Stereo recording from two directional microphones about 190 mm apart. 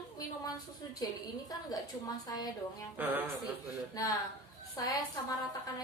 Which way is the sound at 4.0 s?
20° left (ahead or behind).